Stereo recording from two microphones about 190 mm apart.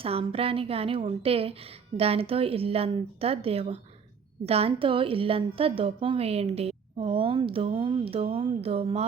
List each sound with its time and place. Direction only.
0.0 s a woman's voice: 30° right (ahead or behind)